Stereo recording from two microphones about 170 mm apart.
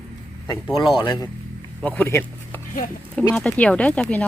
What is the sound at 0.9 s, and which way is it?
Speech, 30° left (ahead or behind).